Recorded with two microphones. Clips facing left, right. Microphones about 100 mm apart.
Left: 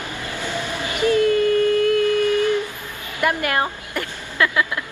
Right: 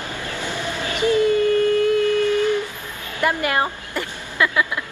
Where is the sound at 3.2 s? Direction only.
20° right (ahead or behind).